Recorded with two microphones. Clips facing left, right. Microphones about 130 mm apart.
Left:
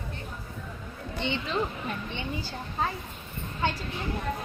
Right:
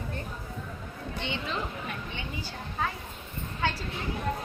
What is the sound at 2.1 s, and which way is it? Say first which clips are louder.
Speech: left 3 dB; 30° left (ahead or behind).